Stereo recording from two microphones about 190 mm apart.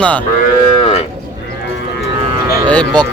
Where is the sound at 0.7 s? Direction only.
30° left (ahead or behind).